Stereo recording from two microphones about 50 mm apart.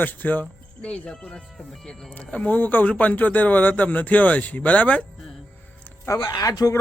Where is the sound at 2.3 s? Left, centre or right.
Left.